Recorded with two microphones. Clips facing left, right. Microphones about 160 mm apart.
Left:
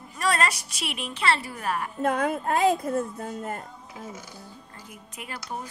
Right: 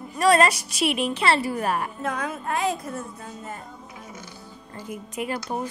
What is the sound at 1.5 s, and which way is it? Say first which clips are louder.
Speech: right 4 dB; 30° right (ahead or behind).